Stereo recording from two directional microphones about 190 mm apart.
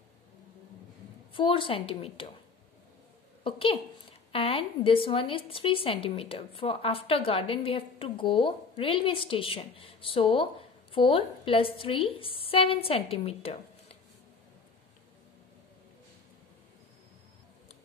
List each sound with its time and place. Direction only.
1.3 s speech: 25° left (ahead or behind)
3.4 s speech: 30° left (ahead or behind)